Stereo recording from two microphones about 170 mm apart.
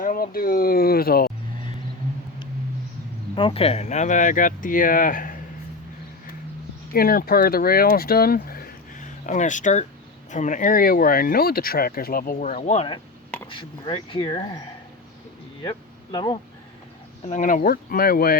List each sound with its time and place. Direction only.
0.0 s speech: 55° left (ahead or behind)
3.3 s speech: 30° left (ahead or behind); by 5.4 s 50° left (ahead or behind)
6.9 s speech: 60° left (ahead or behind); by 14.6 s 25° left (ahead or behind)
15.6 s speech: 25° left (ahead or behind)
17.2 s speech: 50° left (ahead or behind)